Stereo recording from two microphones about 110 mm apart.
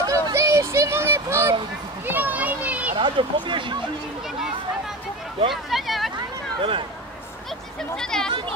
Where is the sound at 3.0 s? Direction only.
50° right (ahead or behind).